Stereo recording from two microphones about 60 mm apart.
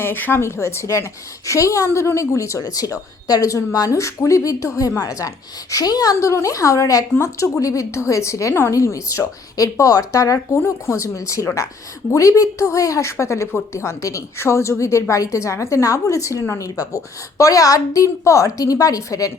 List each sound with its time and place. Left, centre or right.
0.0 s a woman's voice: left
5.7 s a woman's voice: left
6.1 s a woman's voice: left
10.8 s a woman's voice: left